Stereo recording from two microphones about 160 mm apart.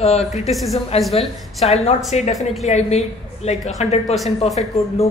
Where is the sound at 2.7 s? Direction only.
45° left (ahead or behind).